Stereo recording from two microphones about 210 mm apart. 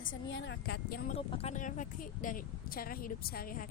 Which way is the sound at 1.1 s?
25° left (ahead or behind).